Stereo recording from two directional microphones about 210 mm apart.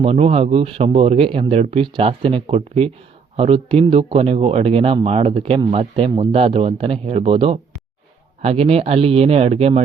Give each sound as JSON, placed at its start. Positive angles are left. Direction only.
{"t": 0.0, "sound": "speech", "side_deg": -30}